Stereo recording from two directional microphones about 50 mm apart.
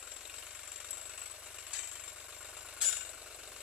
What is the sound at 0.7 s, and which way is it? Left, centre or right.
Jackhammer, centre.